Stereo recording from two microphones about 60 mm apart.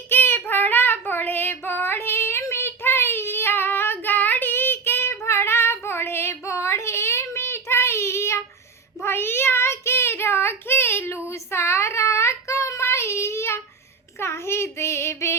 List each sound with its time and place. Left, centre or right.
0.1 s child singing: left